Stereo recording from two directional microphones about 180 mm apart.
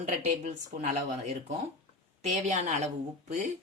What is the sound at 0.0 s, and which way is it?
Speech, 40° right (ahead or behind).